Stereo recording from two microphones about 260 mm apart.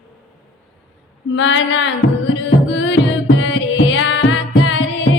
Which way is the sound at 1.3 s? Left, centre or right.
Left.